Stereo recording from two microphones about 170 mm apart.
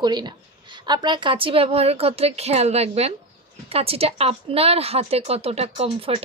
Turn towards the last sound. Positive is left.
turn(degrees=-35)  # may be behind; listen again after turning